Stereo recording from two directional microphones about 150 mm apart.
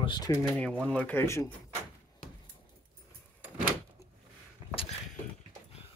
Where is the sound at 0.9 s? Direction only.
10° left (ahead or behind).